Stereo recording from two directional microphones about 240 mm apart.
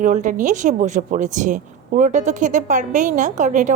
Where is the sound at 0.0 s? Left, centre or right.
Right.